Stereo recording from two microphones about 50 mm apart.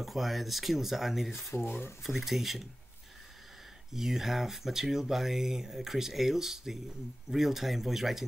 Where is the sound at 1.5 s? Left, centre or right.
Left.